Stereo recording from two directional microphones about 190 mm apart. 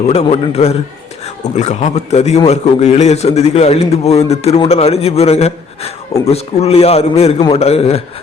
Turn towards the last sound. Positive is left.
turn(degrees=30)  # may be behind; listen again after turning